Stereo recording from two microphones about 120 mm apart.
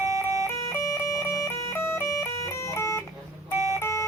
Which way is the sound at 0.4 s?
25° left (ahead or behind).